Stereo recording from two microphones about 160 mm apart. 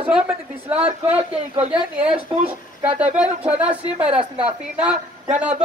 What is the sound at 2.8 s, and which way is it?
Speech, 10° right (ahead or behind).